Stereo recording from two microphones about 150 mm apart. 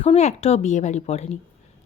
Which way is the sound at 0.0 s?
45° left (ahead or behind).